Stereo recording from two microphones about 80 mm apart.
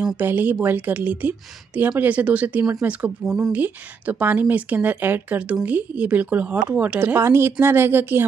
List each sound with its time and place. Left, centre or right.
0.2 s speech: right
7.2 s speech: right